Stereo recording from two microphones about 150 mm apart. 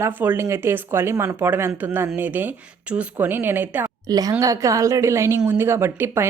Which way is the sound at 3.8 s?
25° right (ahead or behind).